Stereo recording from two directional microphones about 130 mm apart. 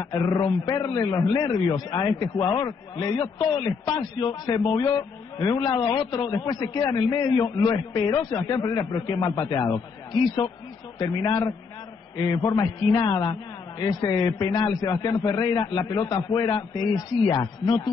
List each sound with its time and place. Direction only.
0.0 s a man's voice: 30° left (ahead or behind)